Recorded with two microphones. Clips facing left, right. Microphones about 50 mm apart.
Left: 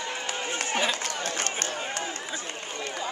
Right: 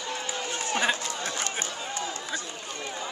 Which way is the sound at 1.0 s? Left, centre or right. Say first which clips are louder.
Left 1 dB; left.